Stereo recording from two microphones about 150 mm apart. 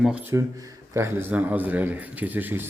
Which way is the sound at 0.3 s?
20° right (ahead or behind).